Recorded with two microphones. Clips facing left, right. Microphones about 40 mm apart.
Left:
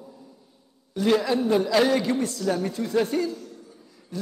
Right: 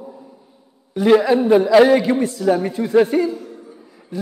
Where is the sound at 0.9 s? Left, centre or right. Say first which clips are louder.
Right 8 dB; centre.